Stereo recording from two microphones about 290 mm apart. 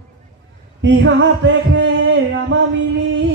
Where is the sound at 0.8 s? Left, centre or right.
Right.